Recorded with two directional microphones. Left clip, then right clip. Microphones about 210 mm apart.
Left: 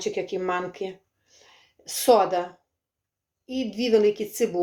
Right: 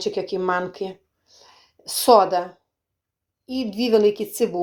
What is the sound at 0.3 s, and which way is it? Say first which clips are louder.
Speech: right 4 dB; 15° right (ahead or behind).